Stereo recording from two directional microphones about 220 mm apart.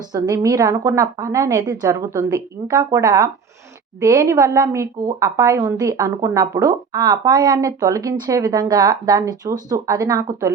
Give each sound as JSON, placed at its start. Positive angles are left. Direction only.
{"t": 0.1, "sound": "a woman's voice", "side_deg": -15}